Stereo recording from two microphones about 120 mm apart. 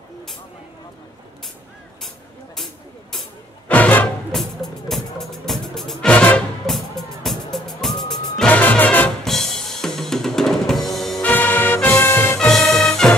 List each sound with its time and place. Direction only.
2.5 s vehicle: centre (ahead or behind)
3.6 s music: 10° left (ahead or behind)
11.2 s music: 15° left (ahead or behind)
12.4 s music: 5° left (ahead or behind)